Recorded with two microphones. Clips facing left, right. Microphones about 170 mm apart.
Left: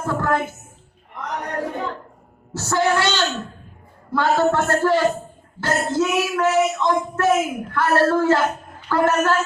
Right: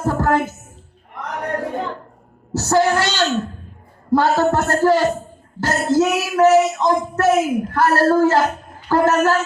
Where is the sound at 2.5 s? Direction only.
40° right (ahead or behind).